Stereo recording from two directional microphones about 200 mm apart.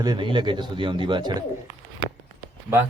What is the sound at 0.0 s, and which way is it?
Speech, 20° right (ahead or behind).